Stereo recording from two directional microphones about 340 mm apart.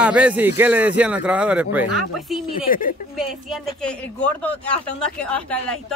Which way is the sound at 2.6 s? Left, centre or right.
Left.